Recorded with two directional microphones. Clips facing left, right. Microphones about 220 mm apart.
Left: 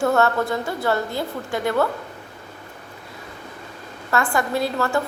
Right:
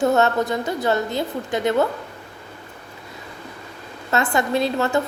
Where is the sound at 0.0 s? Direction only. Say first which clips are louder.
Right 1 dB; 20° right (ahead or behind).